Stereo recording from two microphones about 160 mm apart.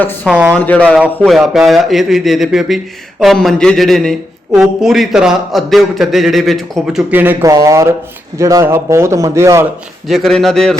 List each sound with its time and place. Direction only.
0.3 s a man's voice: 10° right (ahead or behind)
0.5 s a man's voice: 10° left (ahead or behind); by 9.6 s 15° right (ahead or behind)
10.1 s speech: centre (ahead or behind)